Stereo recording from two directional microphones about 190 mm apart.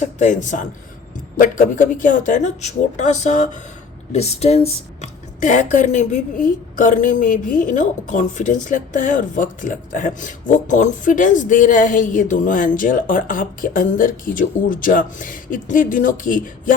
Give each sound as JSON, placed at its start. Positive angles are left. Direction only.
{"t": 0.0, "sound": "a woman's voice", "side_deg": 40}